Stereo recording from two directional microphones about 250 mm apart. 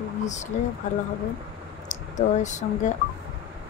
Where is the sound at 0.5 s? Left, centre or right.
Left.